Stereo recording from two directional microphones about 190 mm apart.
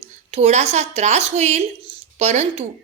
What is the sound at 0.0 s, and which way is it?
A woman's voice, 35° right (ahead or behind).